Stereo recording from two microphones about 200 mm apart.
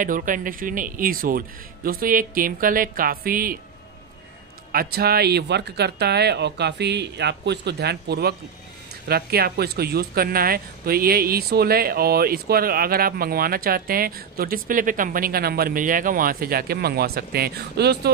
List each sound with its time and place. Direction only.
0.0 s speech: 40° right (ahead or behind)
4.7 s speech: 50° right (ahead or behind)